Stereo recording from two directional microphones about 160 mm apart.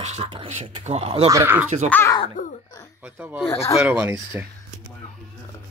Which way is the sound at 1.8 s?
10° left (ahead or behind).